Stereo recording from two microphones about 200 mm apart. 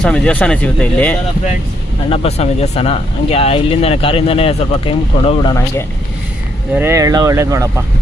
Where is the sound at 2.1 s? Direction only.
30° left (ahead or behind).